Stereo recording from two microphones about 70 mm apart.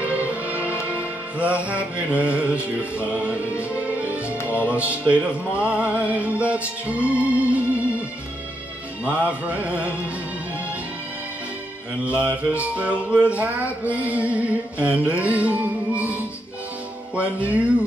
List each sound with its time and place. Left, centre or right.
0.0 s music: right
9.0 s music: right
12.2 s music: centre